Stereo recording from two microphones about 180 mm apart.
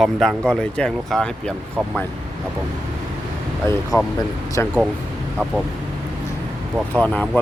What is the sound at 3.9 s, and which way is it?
Speech, 20° left (ahead or behind).